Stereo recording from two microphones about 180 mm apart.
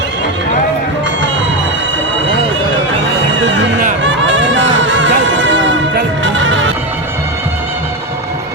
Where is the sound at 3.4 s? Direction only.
90° right.